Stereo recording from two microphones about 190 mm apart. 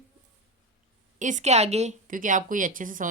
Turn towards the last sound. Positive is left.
turn(degrees=-45)  # may be behind; listen again after turning